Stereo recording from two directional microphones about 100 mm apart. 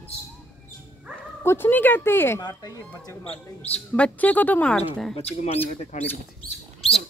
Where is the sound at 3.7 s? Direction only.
15° left (ahead or behind).